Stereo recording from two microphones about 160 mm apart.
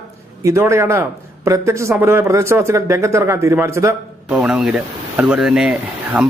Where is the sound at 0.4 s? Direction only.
20° right (ahead or behind).